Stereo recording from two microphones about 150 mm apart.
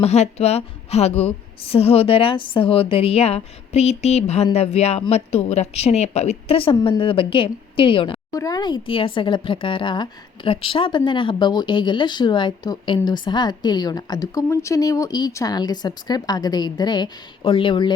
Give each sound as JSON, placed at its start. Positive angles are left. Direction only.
{"t": 0.0, "sound": "a woman's voice", "side_deg": 45}
{"t": 8.3, "sound": "a woman's voice", "side_deg": 25}